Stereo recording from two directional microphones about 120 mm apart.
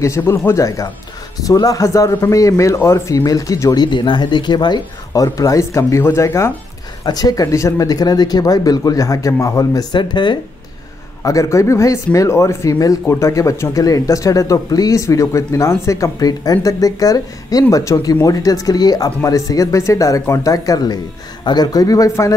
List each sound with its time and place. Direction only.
0.0 s speech: 25° left (ahead or behind)
11.2 s speech: 25° left (ahead or behind)